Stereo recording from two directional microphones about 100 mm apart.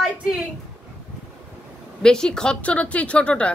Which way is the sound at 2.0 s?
5° left (ahead or behind).